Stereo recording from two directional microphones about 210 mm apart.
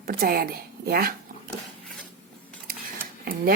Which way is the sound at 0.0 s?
45° right (ahead or behind).